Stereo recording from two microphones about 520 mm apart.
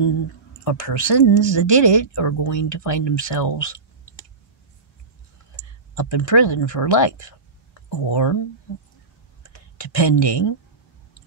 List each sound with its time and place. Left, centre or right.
0.7 s speech: left
5.6 s speech: left
9.8 s speech: left